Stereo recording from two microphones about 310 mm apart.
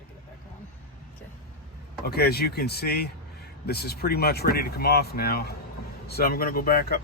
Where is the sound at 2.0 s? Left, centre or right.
Left.